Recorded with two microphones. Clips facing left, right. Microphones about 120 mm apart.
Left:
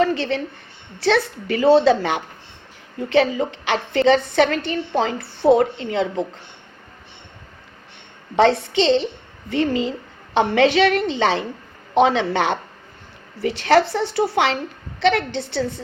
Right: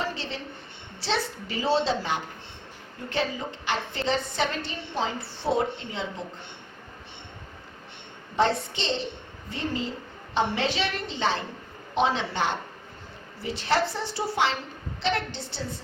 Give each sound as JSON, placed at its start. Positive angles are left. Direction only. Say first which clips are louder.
{"t": 0.0, "sound": "a woman's voice", "louder": "left 12 dB", "side_deg": 70}
{"t": 8.4, "sound": "a woman's voice", "louder": "left 9 dB", "side_deg": 85}
{"t": 11.9, "sound": "a woman's voice", "louder": "left 8 dB", "side_deg": 70}